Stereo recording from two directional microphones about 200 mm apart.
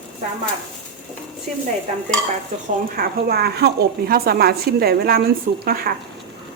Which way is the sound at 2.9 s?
50° right (ahead or behind).